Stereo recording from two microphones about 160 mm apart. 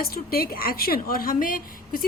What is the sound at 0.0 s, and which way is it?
A woman's voice, 70° left (ahead or behind).